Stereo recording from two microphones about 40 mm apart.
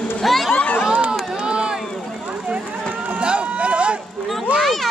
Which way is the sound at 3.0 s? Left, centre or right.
Right.